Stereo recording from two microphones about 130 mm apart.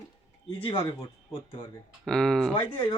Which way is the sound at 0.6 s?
40° left (ahead or behind).